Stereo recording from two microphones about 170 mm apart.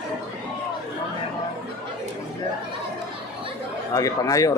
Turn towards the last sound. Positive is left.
turn(degrees=20)  # may be behind; listen again after turning